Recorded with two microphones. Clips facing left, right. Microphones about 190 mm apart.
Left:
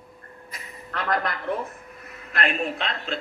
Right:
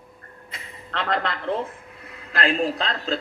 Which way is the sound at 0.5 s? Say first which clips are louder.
Right 3 dB; 25° right (ahead or behind).